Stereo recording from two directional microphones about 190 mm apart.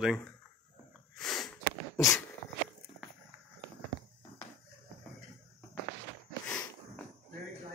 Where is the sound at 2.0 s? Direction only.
15° left (ahead or behind).